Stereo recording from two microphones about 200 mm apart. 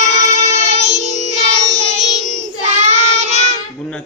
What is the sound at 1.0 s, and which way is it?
Music, 35° right (ahead or behind).